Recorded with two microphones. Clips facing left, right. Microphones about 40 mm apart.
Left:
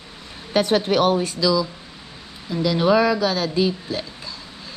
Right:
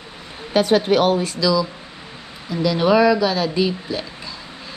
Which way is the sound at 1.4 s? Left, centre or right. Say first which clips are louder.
Right 1 dB; centre.